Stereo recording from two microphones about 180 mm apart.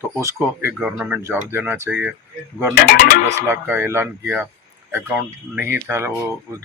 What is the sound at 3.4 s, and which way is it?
Speech, 10° right (ahead or behind).